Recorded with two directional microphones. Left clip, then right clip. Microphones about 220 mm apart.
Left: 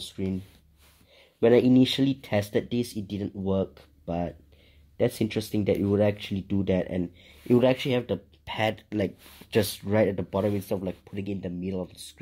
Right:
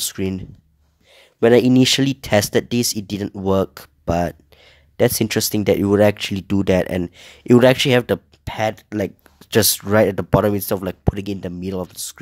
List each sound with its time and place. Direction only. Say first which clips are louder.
0.0 s speech: right 9 dB; 40° right (ahead or behind)
8.5 s speech: right 6 dB; 25° right (ahead or behind)